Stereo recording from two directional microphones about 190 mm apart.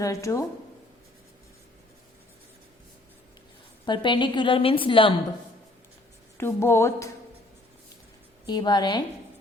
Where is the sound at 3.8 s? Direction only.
25° left (ahead or behind).